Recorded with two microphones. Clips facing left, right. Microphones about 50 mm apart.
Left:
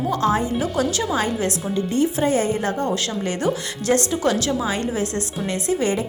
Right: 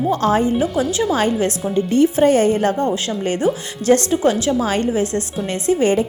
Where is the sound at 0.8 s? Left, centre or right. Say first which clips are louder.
Right 3 dB; right.